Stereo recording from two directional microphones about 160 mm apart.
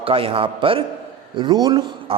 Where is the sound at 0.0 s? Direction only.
35° right (ahead or behind).